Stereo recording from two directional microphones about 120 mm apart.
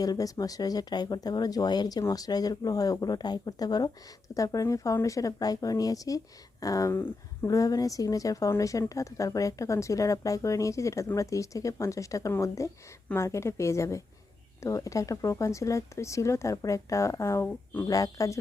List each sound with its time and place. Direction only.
0.0 s speech: 30° left (ahead or behind)